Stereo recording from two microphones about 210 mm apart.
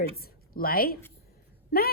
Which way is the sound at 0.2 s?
45° left (ahead or behind).